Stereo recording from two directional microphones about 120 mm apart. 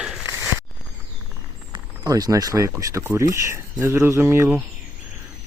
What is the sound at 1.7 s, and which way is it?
Speech, 30° right (ahead or behind).